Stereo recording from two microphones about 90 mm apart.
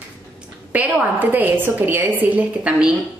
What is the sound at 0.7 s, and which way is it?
A woman's voice, 20° right (ahead or behind).